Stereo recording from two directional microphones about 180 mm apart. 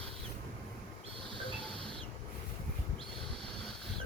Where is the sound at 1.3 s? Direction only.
30° right (ahead or behind).